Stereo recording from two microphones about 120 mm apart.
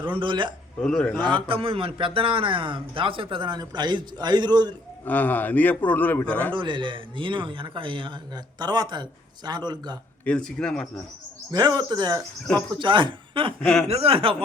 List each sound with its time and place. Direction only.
0.2 s speech: 40° right (ahead or behind)
0.8 s a man's voice: 10° left (ahead or behind)
1.4 s speech: 50° right (ahead or behind)
5.0 s a man's voice: 15° left (ahead or behind)
6.5 s speech: 40° right (ahead or behind)
10.2 s a man's voice: 10° left (ahead or behind)
11.5 s speech: 35° right (ahead or behind)
13.6 s speech: 5° left (ahead or behind)
13.8 s speech: 55° right (ahead or behind)